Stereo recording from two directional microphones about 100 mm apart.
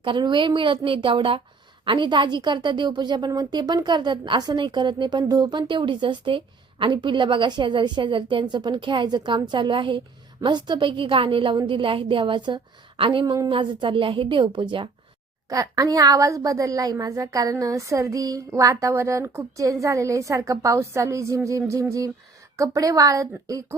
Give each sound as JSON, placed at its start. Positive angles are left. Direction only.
{"t": 0.0, "sound": "a woman's voice", "side_deg": -50}
{"t": 13.5, "sound": "a woman's voice", "side_deg": -55}
{"t": 15.4, "sound": "a woman's voice", "side_deg": -35}